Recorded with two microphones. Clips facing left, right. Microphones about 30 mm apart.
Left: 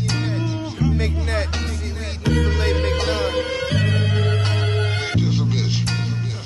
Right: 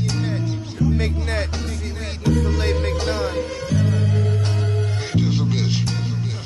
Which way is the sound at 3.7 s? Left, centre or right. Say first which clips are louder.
Even; left.